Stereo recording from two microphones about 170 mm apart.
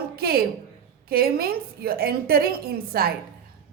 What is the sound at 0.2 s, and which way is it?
A woman's voice, 65° right (ahead or behind).